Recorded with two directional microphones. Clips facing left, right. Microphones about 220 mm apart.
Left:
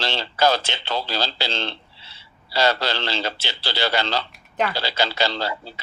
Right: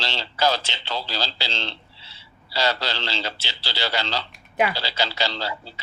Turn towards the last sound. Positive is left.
turn(degrees=55)  # may be behind; listen again after turning